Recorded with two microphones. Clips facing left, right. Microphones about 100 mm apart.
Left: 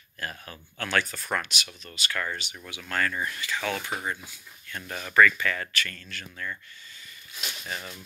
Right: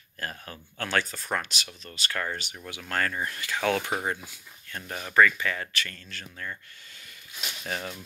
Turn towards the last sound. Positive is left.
turn(degrees=-60)  # may be behind; listen again after turning